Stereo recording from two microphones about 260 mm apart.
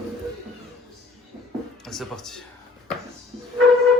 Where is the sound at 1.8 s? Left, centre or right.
Centre.